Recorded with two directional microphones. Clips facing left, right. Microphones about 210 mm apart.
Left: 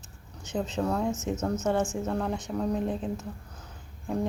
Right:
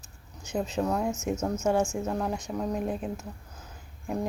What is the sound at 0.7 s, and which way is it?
A woman's voice, 10° right (ahead or behind).